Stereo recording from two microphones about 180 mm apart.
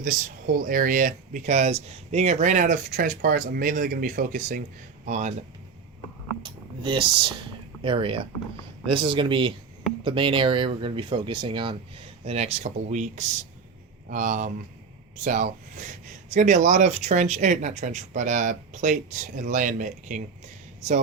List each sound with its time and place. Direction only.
0.0 s speech: 50° right (ahead or behind)
6.4 s speech: 25° right (ahead or behind); by 20.2 s 45° right (ahead or behind)